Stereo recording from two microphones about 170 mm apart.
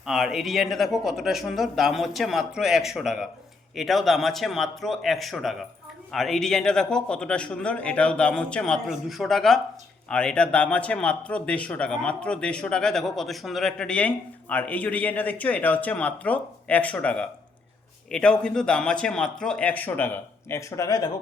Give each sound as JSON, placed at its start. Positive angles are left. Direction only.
{"t": 0.0, "sound": "a man's voice", "side_deg": 0}